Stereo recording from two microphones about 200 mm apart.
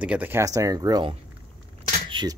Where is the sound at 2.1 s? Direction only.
20° right (ahead or behind).